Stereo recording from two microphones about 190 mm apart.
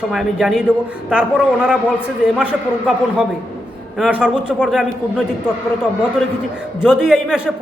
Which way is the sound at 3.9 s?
5° right (ahead or behind).